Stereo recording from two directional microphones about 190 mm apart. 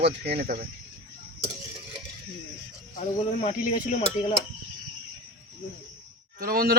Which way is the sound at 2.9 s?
40° left (ahead or behind).